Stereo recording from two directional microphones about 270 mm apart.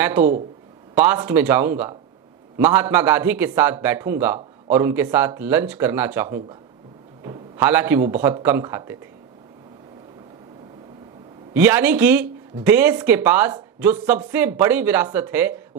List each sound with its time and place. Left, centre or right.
0.0 s a man's voice: centre
7.2 s speech: centre
11.5 s speech: centre